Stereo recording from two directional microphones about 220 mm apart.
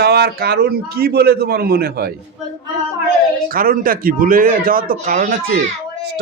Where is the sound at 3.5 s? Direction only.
40° right (ahead or behind).